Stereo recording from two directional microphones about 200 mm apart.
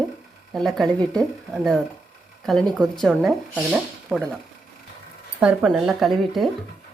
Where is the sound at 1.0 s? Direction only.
20° right (ahead or behind).